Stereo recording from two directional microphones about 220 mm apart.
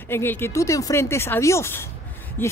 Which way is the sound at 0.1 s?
10° left (ahead or behind).